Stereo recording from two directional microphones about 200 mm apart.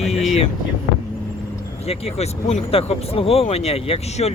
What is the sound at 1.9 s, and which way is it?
Speech, 30° left (ahead or behind).